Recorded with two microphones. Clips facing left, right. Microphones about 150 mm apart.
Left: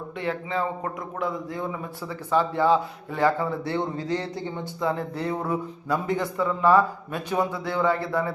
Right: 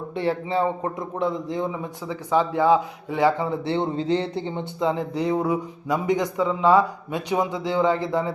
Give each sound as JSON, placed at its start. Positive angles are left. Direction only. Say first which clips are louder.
{"t": 0.2, "sound": "a man's voice", "louder": "right 5 dB", "side_deg": -30}